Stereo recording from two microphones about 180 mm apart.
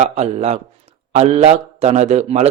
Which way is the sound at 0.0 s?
40° right (ahead or behind).